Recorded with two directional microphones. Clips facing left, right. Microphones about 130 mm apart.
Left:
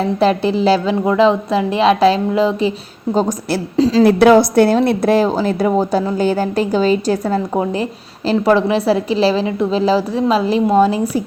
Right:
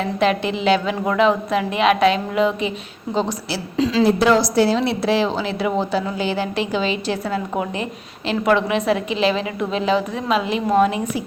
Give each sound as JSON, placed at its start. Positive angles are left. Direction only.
{"t": 0.0, "sound": "a woman's voice", "side_deg": 35}
{"t": 3.2, "sound": "a woman's voice", "side_deg": 45}
{"t": 4.0, "sound": "a woman's voice", "side_deg": 60}